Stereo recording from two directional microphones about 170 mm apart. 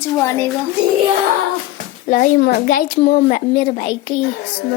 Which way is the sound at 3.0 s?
45° left (ahead or behind).